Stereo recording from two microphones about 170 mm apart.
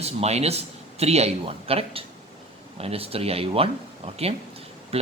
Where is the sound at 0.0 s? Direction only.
40° right (ahead or behind).